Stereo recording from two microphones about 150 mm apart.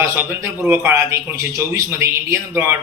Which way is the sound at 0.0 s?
15° right (ahead or behind).